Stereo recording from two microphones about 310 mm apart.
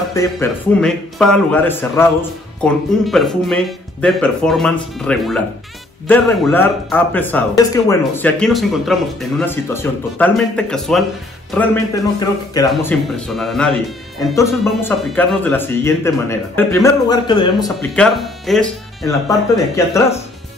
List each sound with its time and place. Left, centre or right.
0.1 s speech: centre
18.0 s speech: centre